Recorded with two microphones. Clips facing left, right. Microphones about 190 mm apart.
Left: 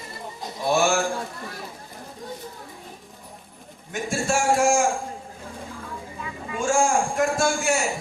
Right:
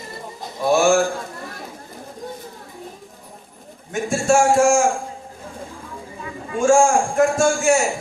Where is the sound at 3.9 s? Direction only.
45° right (ahead or behind).